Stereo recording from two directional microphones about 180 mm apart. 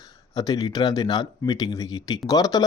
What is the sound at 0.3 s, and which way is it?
Speech, 20° left (ahead or behind).